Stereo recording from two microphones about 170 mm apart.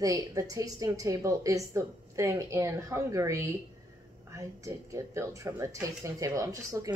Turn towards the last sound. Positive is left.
turn(degrees=-20)  # may be behind; listen again after turning